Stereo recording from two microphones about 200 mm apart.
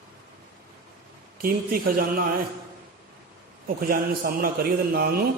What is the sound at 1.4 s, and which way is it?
Speech, 45° right (ahead or behind).